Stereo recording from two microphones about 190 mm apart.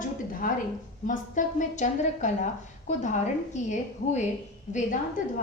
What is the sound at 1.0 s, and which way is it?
A woman's voice, 40° left (ahead or behind).